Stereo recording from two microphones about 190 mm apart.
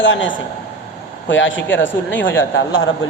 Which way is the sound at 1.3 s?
80° left.